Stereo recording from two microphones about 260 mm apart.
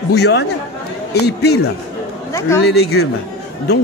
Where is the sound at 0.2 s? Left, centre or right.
Left.